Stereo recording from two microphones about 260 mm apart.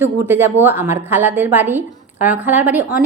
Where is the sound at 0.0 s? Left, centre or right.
Centre.